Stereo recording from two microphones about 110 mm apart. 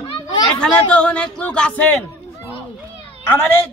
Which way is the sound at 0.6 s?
10° left (ahead or behind).